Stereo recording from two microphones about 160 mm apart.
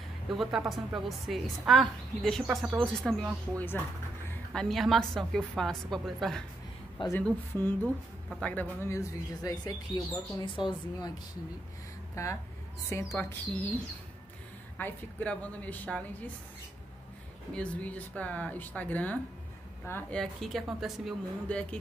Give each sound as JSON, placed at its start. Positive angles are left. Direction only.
{"t": 0.3, "sound": "a woman's voice", "side_deg": 0}
{"t": 7.0, "sound": "a woman's voice", "side_deg": 30}
{"t": 7.5, "sound": "speech", "side_deg": 10}
{"t": 12.9, "sound": "speech", "side_deg": 15}
{"t": 14.8, "sound": "speech", "side_deg": 10}
{"t": 17.6, "sound": "a woman's voice", "side_deg": 10}